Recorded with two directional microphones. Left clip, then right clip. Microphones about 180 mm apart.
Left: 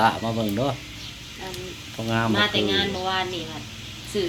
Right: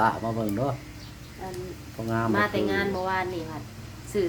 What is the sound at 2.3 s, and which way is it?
Speech, 20° right (ahead or behind).